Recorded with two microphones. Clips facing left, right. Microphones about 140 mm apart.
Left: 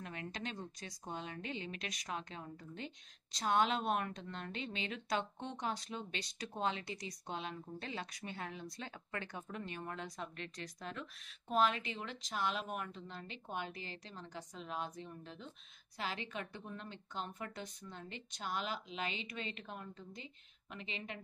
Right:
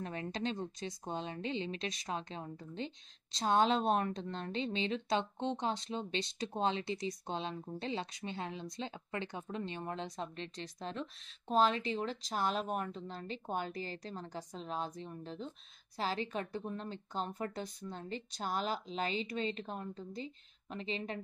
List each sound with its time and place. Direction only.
0.0 s speech: 30° right (ahead or behind)